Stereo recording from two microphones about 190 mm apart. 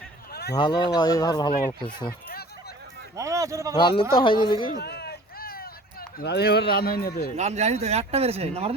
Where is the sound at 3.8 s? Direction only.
25° left (ahead or behind).